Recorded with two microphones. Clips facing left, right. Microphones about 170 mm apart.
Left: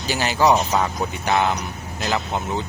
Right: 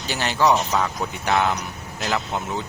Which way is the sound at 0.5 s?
15° left (ahead or behind).